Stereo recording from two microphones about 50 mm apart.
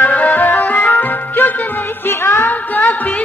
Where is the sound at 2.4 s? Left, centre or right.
Left.